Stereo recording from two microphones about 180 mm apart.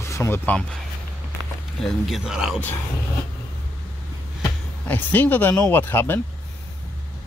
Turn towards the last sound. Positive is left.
turn(degrees=10)  # may be behind; listen again after turning